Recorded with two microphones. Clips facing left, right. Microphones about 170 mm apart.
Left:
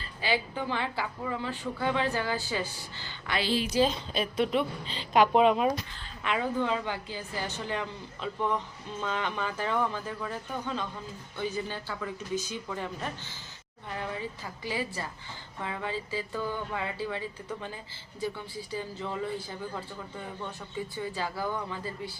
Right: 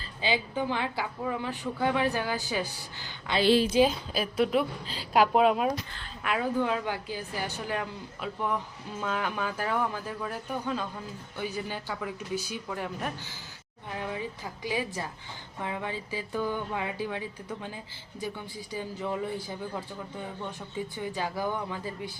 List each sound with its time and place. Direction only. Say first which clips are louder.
0.2 s a woman's voice: right 1 dB; 20° right (ahead or behind)
20.9 s a woman's voice: right 1 dB; 15° right (ahead or behind)